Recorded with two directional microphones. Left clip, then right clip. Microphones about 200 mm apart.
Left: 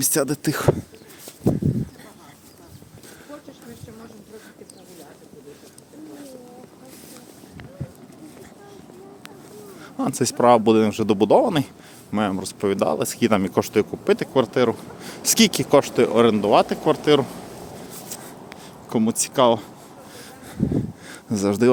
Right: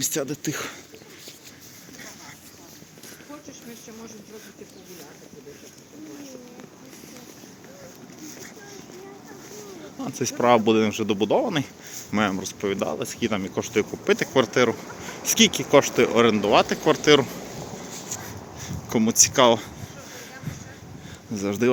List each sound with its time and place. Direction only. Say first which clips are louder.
0.1 s speech: left 6 dB; 35° left (ahead or behind)
10.0 s speech: left 5 dB; 30° left (ahead or behind)
12.1 s speech: even; 15° left (ahead or behind)
12.4 s speech: left 4 dB; 25° left (ahead or behind)
13.7 s speech: right 1 dB; 20° left (ahead or behind)
15.0 s speech: left 1 dB; 30° left (ahead or behind)
15.8 s speech: left 2 dB; 20° left (ahead or behind)
18.6 s speech: left 1 dB; 15° left (ahead or behind)
21.1 s a sound: left 5 dB; 30° left (ahead or behind)